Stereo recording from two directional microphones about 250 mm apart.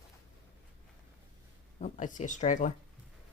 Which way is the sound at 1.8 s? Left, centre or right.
Left.